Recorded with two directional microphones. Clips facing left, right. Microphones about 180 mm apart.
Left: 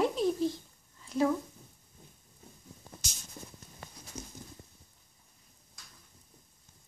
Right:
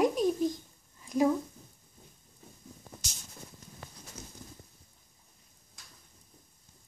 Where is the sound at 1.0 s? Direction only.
15° right (ahead or behind).